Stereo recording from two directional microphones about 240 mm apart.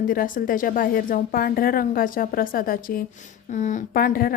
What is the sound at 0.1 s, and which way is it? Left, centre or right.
Speech, left.